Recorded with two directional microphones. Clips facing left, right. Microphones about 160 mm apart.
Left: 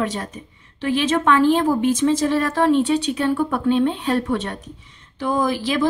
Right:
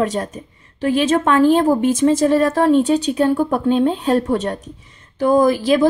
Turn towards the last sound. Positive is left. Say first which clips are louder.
# right 6 dB
turn(degrees=-45)  # may be behind; listen again after turning